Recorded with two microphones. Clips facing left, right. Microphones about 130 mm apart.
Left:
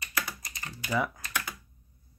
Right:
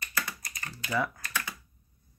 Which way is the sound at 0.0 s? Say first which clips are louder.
Even; 20° left (ahead or behind).